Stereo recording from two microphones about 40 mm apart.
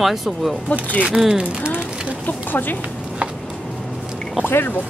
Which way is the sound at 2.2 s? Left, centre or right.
Left.